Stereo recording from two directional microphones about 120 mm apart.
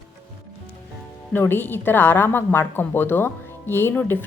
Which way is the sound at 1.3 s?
15° left (ahead or behind).